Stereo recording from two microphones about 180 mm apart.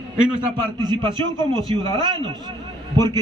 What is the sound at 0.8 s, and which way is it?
A man's voice, 25° right (ahead or behind).